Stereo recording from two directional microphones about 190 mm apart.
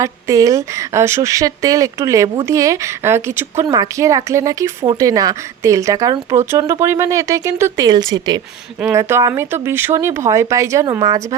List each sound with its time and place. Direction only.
0.0 s speech: 15° right (ahead or behind)